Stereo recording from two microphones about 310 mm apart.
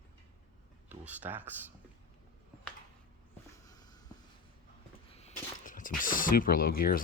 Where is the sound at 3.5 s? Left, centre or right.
Centre.